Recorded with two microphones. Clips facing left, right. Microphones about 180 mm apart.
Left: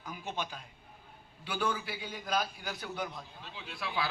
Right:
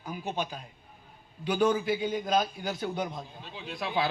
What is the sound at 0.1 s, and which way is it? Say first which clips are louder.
A man's voice: right 5 dB; 15° right (ahead or behind).